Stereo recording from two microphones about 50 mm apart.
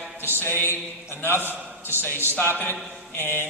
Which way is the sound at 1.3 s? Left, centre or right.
Right.